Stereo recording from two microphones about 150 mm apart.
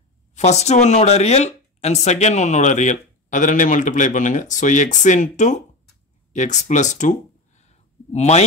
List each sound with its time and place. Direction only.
0.3 s speech: 45° left (ahead or behind)